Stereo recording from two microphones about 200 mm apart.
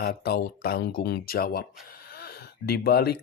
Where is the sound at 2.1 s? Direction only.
50° left (ahead or behind).